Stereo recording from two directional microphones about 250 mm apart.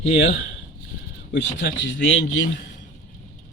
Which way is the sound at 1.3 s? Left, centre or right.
Left.